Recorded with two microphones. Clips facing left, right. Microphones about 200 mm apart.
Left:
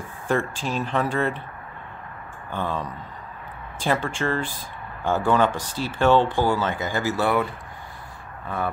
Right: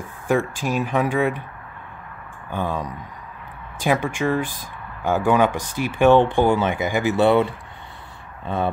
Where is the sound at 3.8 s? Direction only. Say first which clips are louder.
Right 3 dB; 10° right (ahead or behind).